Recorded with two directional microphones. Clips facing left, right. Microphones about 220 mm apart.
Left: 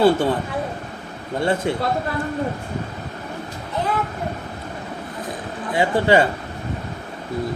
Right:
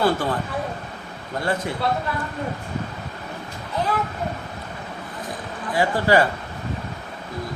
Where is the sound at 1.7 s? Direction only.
25° left (ahead or behind).